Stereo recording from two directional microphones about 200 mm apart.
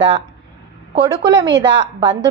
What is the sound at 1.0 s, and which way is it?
Speech, 20° right (ahead or behind).